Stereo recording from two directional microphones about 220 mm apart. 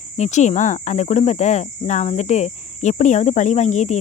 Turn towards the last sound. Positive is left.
turn(degrees=30)  # may be behind; listen again after turning